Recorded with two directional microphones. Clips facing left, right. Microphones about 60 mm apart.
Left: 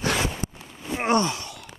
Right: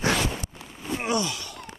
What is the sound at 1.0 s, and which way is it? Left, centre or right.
Sigh, left.